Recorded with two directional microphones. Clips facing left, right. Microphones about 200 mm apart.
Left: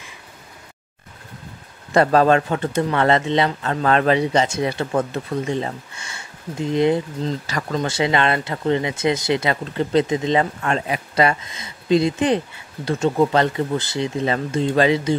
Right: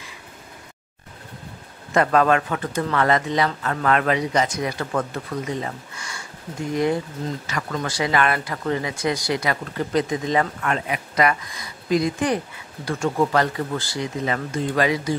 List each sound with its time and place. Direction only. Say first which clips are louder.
2.0 s speech: left 3 dB; 30° left (ahead or behind)